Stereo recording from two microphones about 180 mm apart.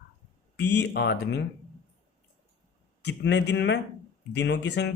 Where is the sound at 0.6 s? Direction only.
70° left (ahead or behind).